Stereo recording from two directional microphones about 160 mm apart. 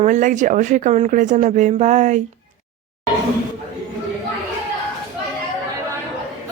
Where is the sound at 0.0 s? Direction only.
50° right (ahead or behind).